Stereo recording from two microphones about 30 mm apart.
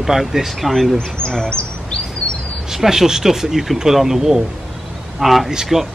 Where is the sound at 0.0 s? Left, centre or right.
Centre.